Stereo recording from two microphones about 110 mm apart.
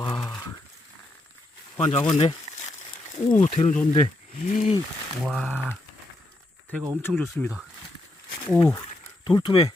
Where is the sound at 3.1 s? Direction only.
80° left.